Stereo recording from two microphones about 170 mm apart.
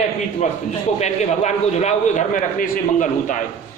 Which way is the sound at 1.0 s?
40° left (ahead or behind).